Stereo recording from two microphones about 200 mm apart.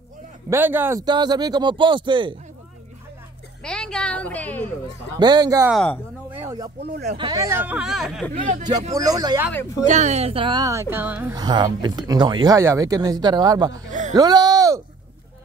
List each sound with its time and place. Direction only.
0.5 s speech: 10° right (ahead or behind)
3.6 s a sound: 5° left (ahead or behind)
5.2 s speech: 20° right (ahead or behind)
5.7 s speech: 5° left (ahead or behind)
6.3 s a sound: 15° right (ahead or behind)
7.2 s speech: 20° right (ahead or behind); by 8.3 s centre (ahead or behind)
8.9 s speech: 15° right (ahead or behind)
9.5 s speech: 10° left (ahead or behind)
9.8 s speech: 35° right (ahead or behind); by 11.3 s 10° right (ahead or behind)
11.3 s speech: 20° right (ahead or behind)
13.8 s music: 40° right (ahead or behind)
14.1 s speech: 20° right (ahead or behind)